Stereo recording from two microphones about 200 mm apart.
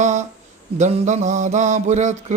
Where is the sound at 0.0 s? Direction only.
35° right (ahead or behind).